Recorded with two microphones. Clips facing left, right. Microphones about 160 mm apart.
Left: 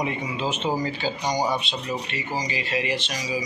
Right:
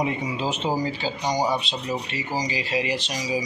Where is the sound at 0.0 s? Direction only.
35° right (ahead or behind).